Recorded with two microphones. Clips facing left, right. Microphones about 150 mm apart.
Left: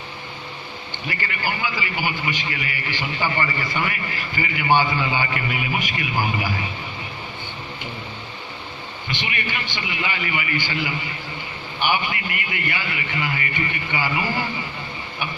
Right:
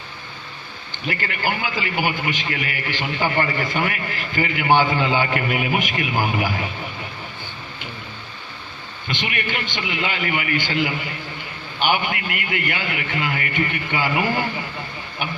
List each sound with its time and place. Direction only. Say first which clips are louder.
1.0 s a man's voice: right 3 dB; 60° right (ahead or behind)
9.0 s a man's voice: right 3 dB; 60° right (ahead or behind)